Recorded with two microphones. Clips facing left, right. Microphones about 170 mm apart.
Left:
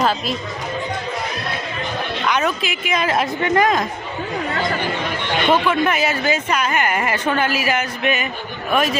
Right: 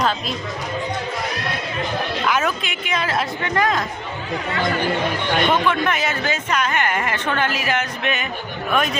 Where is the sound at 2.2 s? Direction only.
Centre (ahead or behind); by 3.9 s 20° left (ahead or behind).